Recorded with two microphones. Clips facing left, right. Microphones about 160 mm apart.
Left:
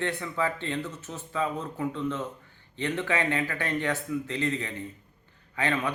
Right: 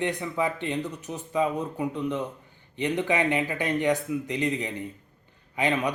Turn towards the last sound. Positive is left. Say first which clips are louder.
# right 3 dB
turn(degrees=-15)  # may be behind; listen again after turning